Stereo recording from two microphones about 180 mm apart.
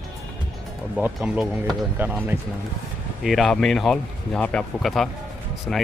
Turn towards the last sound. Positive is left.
turn(degrees=5)  # may be behind; listen again after turning